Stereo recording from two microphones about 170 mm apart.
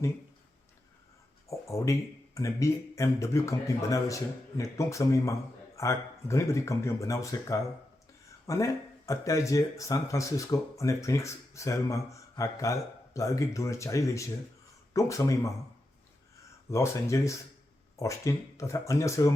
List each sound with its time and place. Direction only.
1.5 s speech: 15° left (ahead or behind)
16.6 s speech: 15° left (ahead or behind)